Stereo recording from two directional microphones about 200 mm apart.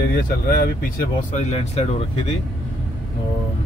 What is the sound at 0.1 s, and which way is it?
Speech, 50° left (ahead or behind).